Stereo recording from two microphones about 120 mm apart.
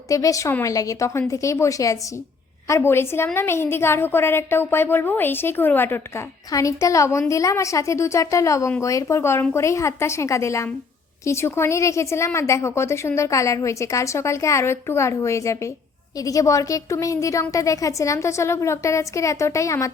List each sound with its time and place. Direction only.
0.1 s a woman's voice: 30° left (ahead or behind)